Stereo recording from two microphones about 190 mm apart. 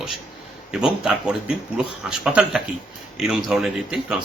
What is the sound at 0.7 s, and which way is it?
A man's voice, 5° right (ahead or behind).